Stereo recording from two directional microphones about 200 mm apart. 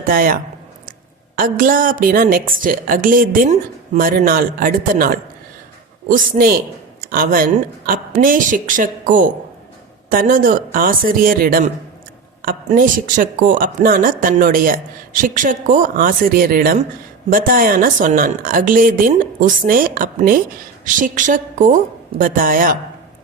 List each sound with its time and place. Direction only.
0.0 s a woman's voice: 45° right (ahead or behind)